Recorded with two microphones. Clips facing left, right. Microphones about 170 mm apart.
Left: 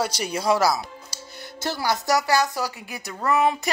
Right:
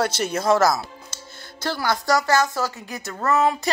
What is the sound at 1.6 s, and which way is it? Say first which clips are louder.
A woman's voice: right 1 dB; 20° left (ahead or behind).